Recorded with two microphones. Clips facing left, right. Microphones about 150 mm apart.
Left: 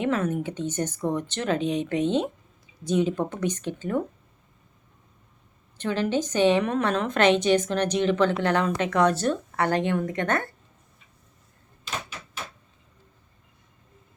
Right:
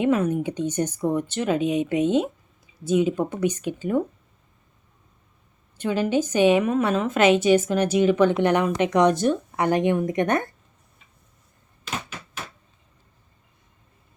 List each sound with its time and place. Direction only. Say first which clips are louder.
0.0 s a woman's voice: right 4 dB; 15° right (ahead or behind)
5.7 s a woman's voice: right 3 dB; 10° right (ahead or behind)